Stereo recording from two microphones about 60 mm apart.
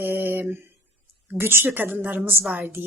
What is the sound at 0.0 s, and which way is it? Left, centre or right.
Mantra, right.